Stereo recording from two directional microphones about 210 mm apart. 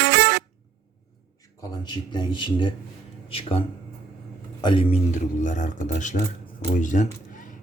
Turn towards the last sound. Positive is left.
turn(degrees=35)  # may be behind; listen again after turning